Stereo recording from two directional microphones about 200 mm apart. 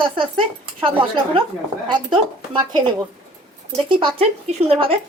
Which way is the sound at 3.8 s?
25° right (ahead or behind).